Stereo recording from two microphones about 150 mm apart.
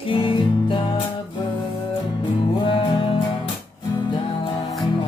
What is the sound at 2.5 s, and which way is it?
Music, 30° left (ahead or behind).